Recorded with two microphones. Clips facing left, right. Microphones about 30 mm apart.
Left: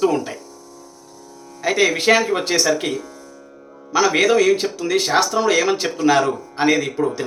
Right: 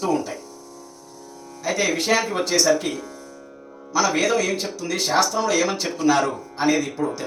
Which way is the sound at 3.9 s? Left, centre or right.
Left.